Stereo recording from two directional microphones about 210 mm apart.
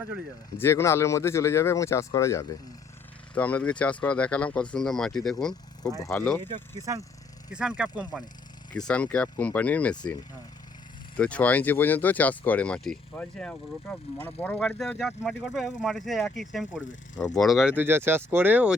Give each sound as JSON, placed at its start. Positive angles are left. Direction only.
{"t": 0.6, "sound": "speech", "side_deg": 10}
{"t": 6.4, "sound": "speech", "side_deg": -20}
{"t": 7.5, "sound": "speech", "side_deg": -5}
{"t": 8.9, "sound": "speech", "side_deg": 5}
{"t": 11.2, "sound": "speech", "side_deg": 5}